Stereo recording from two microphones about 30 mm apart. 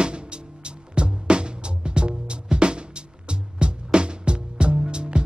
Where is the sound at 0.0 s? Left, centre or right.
Right.